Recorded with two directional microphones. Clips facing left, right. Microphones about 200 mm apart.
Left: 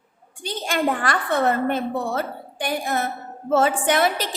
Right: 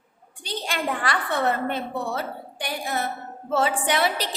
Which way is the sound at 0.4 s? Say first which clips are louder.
Left 5 dB; 50° left (ahead or behind).